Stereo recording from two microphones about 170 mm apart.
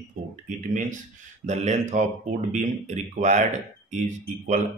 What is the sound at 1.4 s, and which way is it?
Speech, 45° right (ahead or behind).